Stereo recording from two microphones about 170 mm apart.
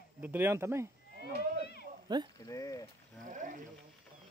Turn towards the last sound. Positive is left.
turn(degrees=-45)  # may be behind; listen again after turning